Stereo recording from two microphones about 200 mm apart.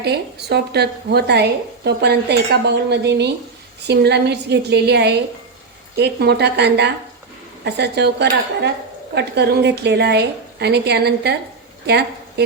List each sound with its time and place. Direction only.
0.0 s a woman's voice: 55° right (ahead or behind)